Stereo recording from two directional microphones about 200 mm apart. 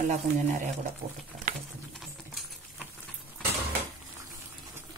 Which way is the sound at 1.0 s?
50° right (ahead or behind).